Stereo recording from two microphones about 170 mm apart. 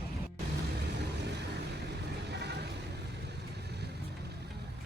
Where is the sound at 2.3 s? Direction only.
80° right.